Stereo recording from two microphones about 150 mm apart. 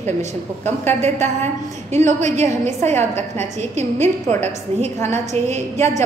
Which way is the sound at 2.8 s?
15° left (ahead or behind).